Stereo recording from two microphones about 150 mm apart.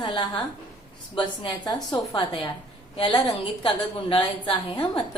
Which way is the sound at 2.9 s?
30° left (ahead or behind).